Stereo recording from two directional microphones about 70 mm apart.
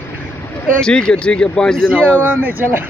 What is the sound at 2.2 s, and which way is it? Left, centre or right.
Speech, right.